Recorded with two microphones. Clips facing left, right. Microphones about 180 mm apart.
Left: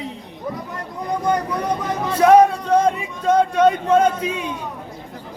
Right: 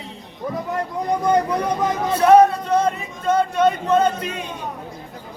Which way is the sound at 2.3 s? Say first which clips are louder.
Even; 10° left (ahead or behind).